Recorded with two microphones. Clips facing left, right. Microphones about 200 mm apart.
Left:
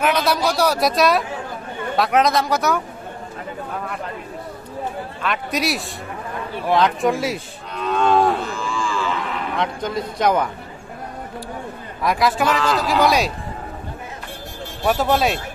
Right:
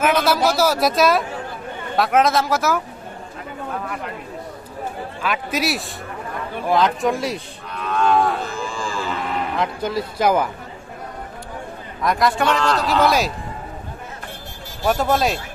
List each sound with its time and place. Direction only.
0.0 s a man's voice: centre (ahead or behind)
5.2 s a man's voice: centre (ahead or behind)
7.9 s cattle: 25° left (ahead or behind)
8.5 s a sound: 35° right (ahead or behind)
9.6 s a man's voice: 5° right (ahead or behind)
12.0 s a man's voice: centre (ahead or behind)
14.9 s a man's voice: centre (ahead or behind)